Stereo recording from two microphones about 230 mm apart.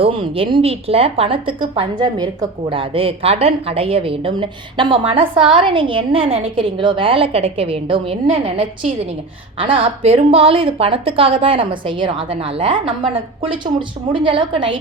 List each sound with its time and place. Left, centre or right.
0.0 s speech: right
9.6 s speech: right